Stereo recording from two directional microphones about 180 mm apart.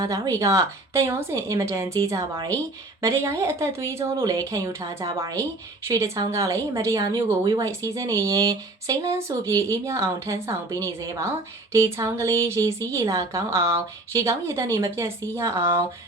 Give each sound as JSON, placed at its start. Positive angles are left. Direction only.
{"t": 0.0, "sound": "a woman's voice", "side_deg": -20}